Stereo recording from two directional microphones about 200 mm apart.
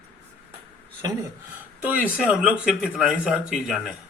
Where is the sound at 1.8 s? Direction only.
10° right (ahead or behind).